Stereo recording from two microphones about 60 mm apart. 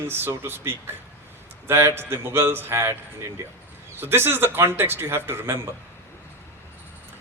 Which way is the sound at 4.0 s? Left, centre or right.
Right.